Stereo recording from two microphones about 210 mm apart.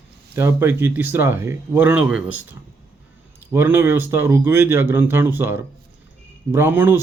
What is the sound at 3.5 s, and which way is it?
Speech, 10° right (ahead or behind).